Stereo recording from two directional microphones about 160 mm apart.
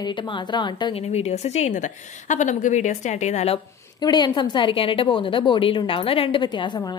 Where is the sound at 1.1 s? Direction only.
40° left (ahead or behind).